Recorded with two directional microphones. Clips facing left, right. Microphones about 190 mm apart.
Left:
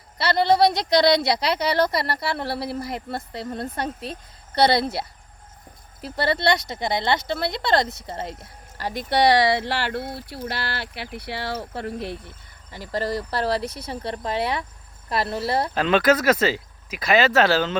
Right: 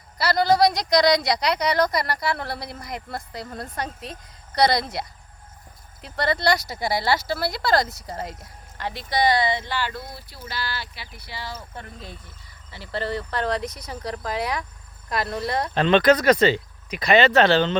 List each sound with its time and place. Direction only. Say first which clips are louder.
0.3 s speech: left 1 dB; 25° left (ahead or behind)
8.9 s speech: left 3 dB; 55° left (ahead or behind); by 12.1 s 75° left (ahead or behind)
12.7 s speech: left 2 dB; 40° left (ahead or behind)
15.7 s speech: right 3 dB; 5° left (ahead or behind)